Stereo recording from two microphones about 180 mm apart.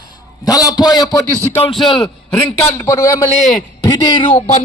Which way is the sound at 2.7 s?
15° left (ahead or behind).